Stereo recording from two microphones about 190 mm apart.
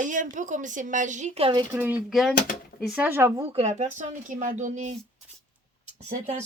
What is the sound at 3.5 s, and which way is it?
Speech, 35° right (ahead or behind).